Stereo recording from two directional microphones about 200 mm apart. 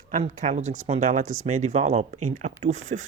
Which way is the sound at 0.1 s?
40° right (ahead or behind).